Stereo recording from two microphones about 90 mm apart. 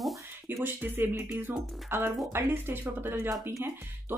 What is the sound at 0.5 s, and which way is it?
Speech, 25° right (ahead or behind).